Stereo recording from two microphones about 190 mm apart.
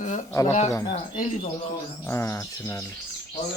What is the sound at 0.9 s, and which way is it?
Speech, 35° left (ahead or behind).